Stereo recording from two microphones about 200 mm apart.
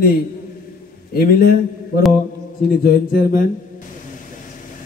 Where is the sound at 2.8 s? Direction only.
45° left (ahead or behind).